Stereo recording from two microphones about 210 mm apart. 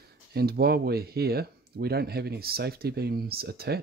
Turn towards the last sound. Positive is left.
turn(degrees=-50)  # may be behind; listen again after turning